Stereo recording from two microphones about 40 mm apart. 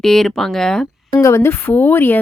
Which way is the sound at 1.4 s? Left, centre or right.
Left.